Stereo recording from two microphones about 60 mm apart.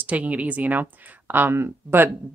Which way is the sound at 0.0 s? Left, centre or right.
Right.